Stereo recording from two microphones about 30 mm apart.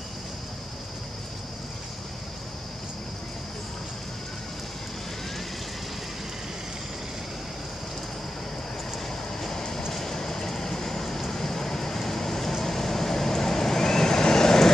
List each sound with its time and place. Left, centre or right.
9.4 s vehicle: centre